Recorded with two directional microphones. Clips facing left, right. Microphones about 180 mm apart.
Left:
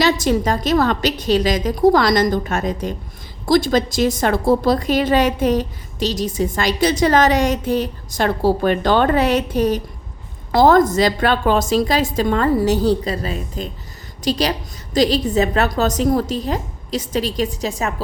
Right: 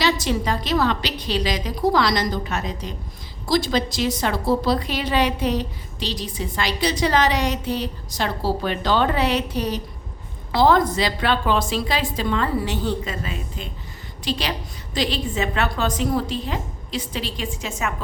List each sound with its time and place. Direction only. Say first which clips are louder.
0.0 s a woman's voice: left 5 dB; 45° left (ahead or behind)